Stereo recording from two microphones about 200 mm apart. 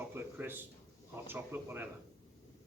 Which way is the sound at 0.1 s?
10° right (ahead or behind).